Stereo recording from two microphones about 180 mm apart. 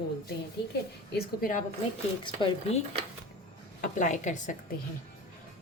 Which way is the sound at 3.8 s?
45° left (ahead or behind).